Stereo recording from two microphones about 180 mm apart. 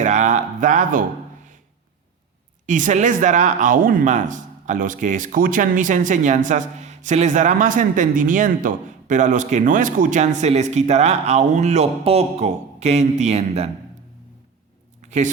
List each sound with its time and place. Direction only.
0.0 s speech: 40° right (ahead or behind)
2.6 s speech: 45° right (ahead or behind)
15.0 s a sound: 40° right (ahead or behind)